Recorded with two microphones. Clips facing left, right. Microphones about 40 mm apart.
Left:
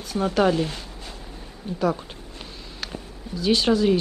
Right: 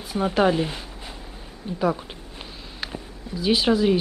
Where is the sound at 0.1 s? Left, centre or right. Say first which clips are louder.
Even; centre.